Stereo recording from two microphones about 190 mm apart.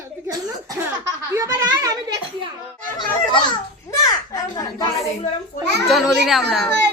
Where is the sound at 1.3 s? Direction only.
15° right (ahead or behind).